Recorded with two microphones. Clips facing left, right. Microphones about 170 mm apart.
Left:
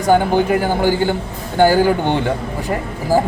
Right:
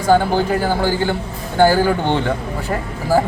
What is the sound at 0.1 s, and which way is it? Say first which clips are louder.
A man's voice: left 1 dB; 15° left (ahead or behind).